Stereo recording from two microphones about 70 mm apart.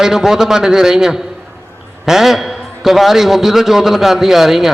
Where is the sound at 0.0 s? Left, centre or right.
Centre.